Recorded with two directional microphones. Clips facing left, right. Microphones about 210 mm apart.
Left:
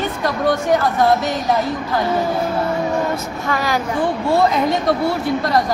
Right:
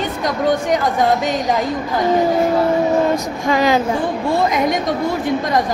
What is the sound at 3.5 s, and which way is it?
Speech, 20° right (ahead or behind).